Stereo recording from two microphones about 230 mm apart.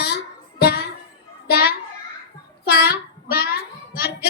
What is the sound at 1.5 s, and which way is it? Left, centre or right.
Children playing, left.